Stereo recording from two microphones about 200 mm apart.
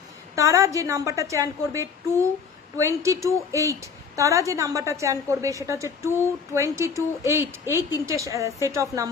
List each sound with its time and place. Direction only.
0.4 s a woman's voice: 15° right (ahead or behind)